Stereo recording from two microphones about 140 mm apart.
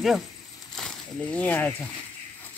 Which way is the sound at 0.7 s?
5° left (ahead or behind).